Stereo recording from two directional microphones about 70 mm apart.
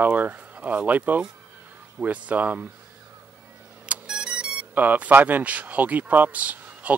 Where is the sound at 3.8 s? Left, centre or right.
Centre.